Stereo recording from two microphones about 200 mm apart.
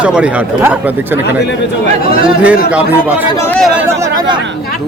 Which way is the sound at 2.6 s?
5° right (ahead or behind).